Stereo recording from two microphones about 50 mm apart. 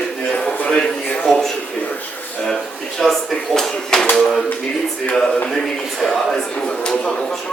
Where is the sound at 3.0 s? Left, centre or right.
Centre.